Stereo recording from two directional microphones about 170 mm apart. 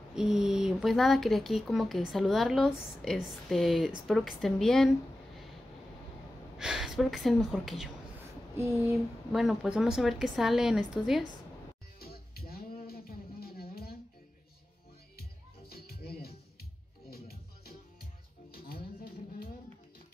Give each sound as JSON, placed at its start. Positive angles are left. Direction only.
{"t": 0.1, "sound": "speech", "side_deg": -5}
{"t": 6.6, "sound": "speech", "side_deg": 0}
{"t": 9.3, "sound": "speech", "side_deg": 0}
{"t": 12.0, "sound": "music", "side_deg": 65}
{"t": 15.7, "sound": "music", "side_deg": 65}